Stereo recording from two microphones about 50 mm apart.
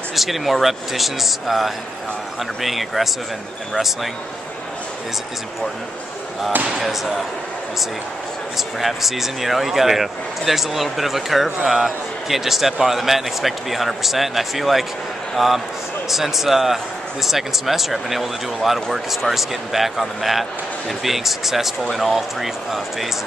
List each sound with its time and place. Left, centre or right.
0.1 s a man's voice: centre
6.8 s a man's voice: centre
8.5 s a man's voice: centre